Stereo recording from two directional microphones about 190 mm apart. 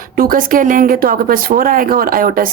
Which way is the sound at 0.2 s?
50° right (ahead or behind).